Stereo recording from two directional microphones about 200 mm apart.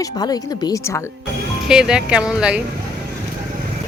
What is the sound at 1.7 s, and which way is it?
Speech, 5° right (ahead or behind).